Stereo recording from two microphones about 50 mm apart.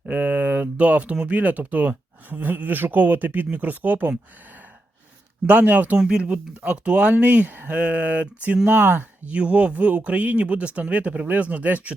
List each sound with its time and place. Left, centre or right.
0.1 s speech: right
5.5 s speech: right
6.0 s speech: centre; by 7.7 s right
7.7 s speech: right
8.6 s speech: right
9.2 s speech: right